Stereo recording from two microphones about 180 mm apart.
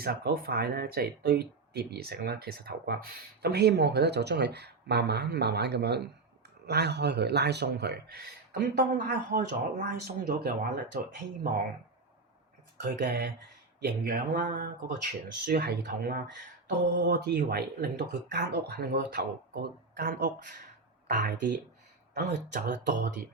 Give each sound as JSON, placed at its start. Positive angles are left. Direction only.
{"t": 0.0, "sound": "speech", "side_deg": -60}
{"t": 12.8, "sound": "speech", "side_deg": -60}
{"t": 13.8, "sound": "speech", "side_deg": -50}